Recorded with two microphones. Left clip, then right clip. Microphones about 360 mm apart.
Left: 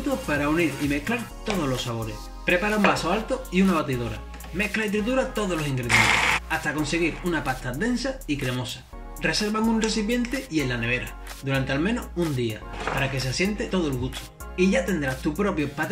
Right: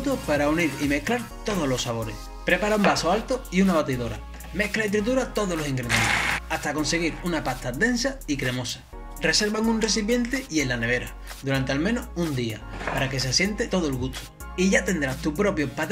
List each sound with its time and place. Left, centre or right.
0.3 s speech: centre